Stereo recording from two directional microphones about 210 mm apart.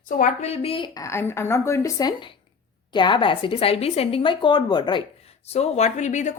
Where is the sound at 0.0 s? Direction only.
40° left (ahead or behind).